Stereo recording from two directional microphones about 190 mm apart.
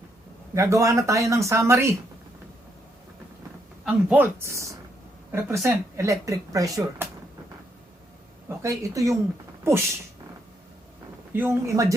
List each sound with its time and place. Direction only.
0.5 s speech: 15° right (ahead or behind)
3.8 s speech: 10° right (ahead or behind)
8.4 s speech: 15° right (ahead or behind)
11.3 s speech: 15° right (ahead or behind)